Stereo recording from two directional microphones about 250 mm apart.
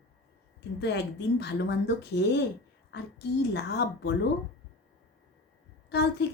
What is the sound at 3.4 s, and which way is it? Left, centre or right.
Speech, left.